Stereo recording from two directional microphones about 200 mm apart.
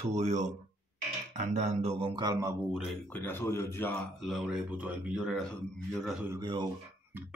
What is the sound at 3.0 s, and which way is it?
Speech, 10° left (ahead or behind).